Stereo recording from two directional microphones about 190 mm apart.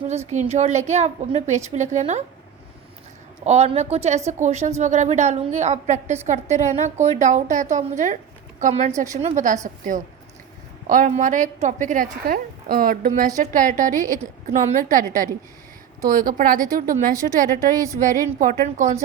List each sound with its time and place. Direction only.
0.1 s a woman's voice: 35° right (ahead or behind)
3.4 s a woman's voice: 35° right (ahead or behind)